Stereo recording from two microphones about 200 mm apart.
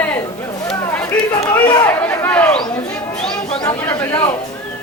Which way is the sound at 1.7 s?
10° left (ahead or behind).